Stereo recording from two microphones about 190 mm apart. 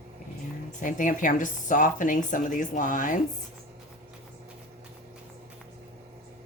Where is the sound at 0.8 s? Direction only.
45° left (ahead or behind).